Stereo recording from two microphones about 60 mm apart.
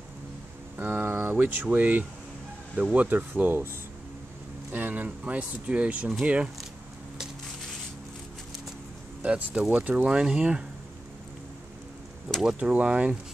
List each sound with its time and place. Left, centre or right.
0.7 s speech: right
4.6 s speech: right
9.2 s speech: centre
12.5 s speech: centre